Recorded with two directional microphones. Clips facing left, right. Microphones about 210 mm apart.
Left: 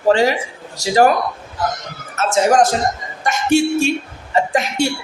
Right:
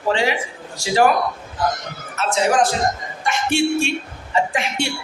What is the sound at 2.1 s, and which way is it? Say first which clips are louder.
A man's voice: left 4 dB; 45° left (ahead or behind).